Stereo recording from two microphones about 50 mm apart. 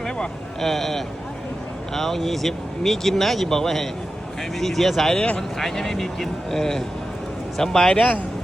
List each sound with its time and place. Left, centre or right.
0.0 s speech: centre
5.1 s speech: left
5.4 s a man's voice: centre